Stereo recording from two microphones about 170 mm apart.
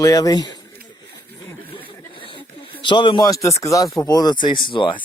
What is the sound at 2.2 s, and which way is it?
Speech, 30° left (ahead or behind).